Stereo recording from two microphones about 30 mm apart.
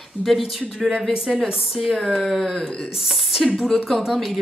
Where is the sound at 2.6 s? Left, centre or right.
Left.